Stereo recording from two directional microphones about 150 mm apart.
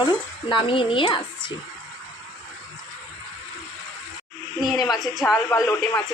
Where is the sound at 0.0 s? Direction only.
35° left (ahead or behind).